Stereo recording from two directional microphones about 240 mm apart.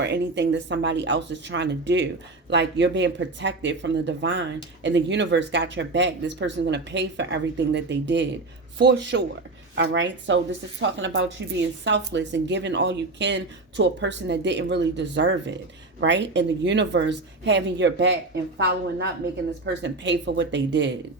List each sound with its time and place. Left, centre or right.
0.0 s a woman's voice: right